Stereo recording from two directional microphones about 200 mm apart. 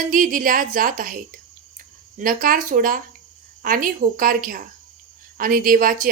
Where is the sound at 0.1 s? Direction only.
40° right (ahead or behind).